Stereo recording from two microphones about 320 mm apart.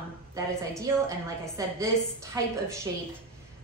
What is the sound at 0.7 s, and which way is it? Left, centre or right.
A woman's voice, centre.